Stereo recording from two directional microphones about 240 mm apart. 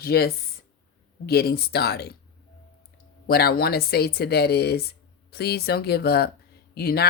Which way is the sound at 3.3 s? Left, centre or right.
Left.